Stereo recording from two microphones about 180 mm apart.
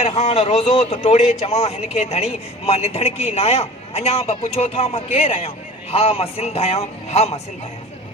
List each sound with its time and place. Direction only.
0.0 s speech: 40° left (ahead or behind)